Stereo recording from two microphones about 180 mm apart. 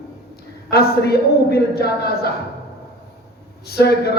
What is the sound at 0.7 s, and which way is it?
A man's voice, 60° left (ahead or behind).